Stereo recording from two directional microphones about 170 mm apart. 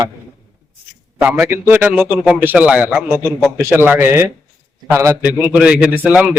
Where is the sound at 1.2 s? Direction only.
10° right (ahead or behind).